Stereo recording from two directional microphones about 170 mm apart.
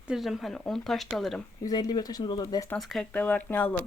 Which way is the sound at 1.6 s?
25° left (ahead or behind).